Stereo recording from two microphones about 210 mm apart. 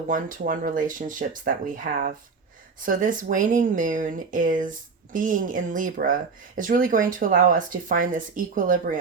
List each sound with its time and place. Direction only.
0.1 s speech: 40° right (ahead or behind)